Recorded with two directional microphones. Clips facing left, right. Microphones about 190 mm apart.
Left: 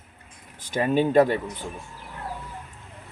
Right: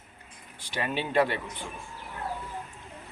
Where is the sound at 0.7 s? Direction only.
45° left (ahead or behind).